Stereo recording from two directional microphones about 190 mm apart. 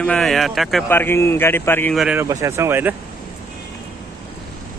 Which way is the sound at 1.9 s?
5° right (ahead or behind).